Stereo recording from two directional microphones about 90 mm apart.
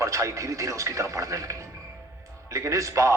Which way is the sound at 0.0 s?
35° right (ahead or behind).